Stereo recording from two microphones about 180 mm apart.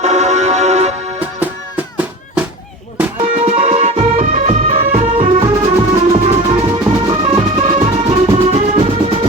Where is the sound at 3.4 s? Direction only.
35° right (ahead or behind).